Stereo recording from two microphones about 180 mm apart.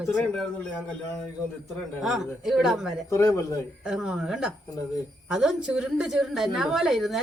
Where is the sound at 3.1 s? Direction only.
15° left (ahead or behind).